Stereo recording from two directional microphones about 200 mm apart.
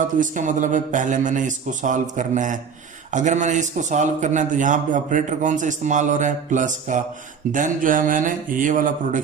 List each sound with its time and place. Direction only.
0.2 s a man's voice: 40° right (ahead or behind)